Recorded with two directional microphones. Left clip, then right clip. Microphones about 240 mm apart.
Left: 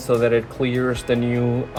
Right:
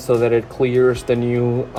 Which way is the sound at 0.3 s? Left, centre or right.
Right.